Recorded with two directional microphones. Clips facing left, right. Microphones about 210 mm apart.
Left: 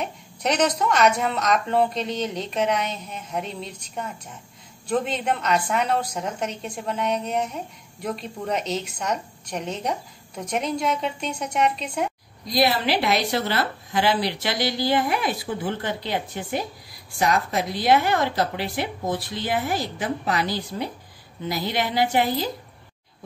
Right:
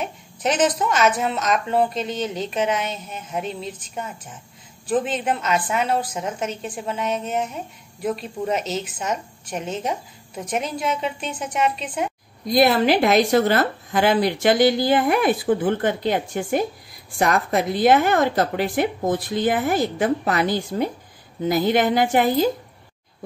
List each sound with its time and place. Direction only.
0.0 s a woman's voice: 5° right (ahead or behind)
12.4 s a woman's voice: 50° right (ahead or behind)